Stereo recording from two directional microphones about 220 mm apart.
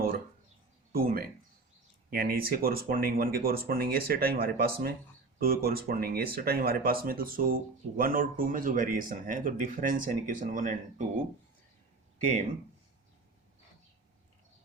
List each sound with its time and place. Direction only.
0.9 s speech: 40° right (ahead or behind)